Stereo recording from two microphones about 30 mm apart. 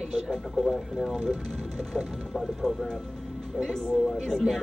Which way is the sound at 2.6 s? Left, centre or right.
Centre.